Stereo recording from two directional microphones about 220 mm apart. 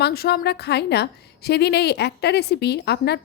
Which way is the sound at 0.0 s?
45° left (ahead or behind).